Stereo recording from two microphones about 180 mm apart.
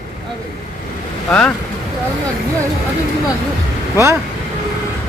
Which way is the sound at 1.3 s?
5° left (ahead or behind).